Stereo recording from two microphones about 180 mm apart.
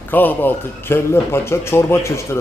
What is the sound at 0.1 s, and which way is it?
A man's voice, 10° left (ahead or behind).